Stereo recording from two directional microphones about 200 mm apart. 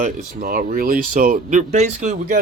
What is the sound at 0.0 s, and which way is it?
Speech, 45° right (ahead or behind).